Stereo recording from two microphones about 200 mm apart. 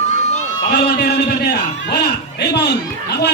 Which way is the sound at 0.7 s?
55° left (ahead or behind).